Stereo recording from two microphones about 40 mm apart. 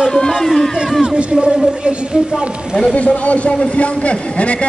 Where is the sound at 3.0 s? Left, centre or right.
Left.